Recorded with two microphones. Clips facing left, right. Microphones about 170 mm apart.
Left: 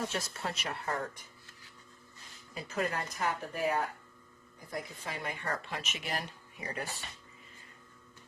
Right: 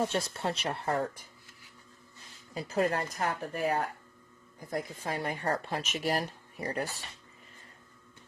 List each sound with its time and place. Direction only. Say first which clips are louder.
0.2 s speech: right 5 dB; 30° right (ahead or behind)
2.6 s speech: right 5 dB; 35° right (ahead or behind)